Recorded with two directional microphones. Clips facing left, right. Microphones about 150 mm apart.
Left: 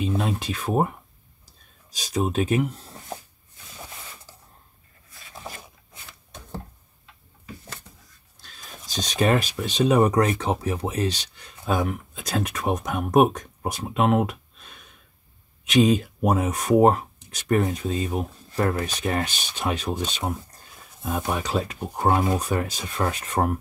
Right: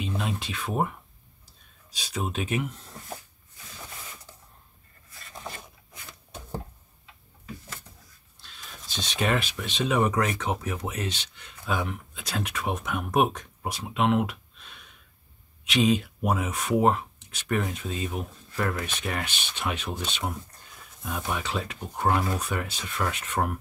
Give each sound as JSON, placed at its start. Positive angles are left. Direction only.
{"t": 0.0, "sound": "speech", "side_deg": 45}
{"t": 5.2, "sound": "a sound", "side_deg": 0}
{"t": 8.4, "sound": "speech", "side_deg": 40}
{"t": 22.0, "sound": "speech", "side_deg": 25}
{"t": 22.3, "sound": "speech", "side_deg": 35}